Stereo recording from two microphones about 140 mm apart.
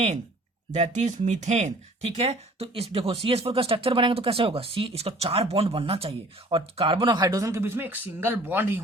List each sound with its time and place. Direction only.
0.7 s speech: 55° right (ahead or behind); by 8.8 s 15° right (ahead or behind)